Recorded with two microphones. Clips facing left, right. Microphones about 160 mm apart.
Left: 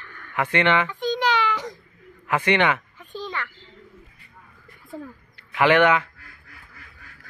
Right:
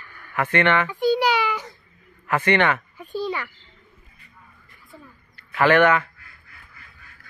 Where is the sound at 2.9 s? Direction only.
10° right (ahead or behind).